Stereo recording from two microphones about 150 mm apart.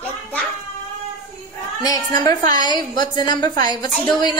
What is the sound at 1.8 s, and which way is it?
A woman's voice, 25° left (ahead or behind).